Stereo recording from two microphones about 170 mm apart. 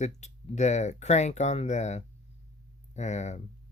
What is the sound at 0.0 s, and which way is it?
Speech, 40° left (ahead or behind).